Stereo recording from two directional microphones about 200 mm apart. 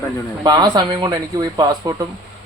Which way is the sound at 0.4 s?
20° right (ahead or behind).